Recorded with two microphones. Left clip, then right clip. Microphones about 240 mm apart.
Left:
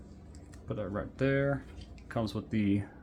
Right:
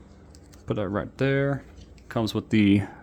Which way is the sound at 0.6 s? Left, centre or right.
Right.